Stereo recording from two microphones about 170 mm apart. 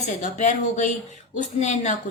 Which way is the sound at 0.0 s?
45° left (ahead or behind).